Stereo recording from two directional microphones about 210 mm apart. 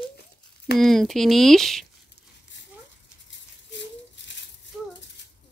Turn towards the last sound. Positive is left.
turn(degrees=60)  # may be behind; listen again after turning